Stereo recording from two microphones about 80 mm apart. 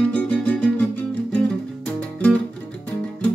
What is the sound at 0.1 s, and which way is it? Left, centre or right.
Music, centre.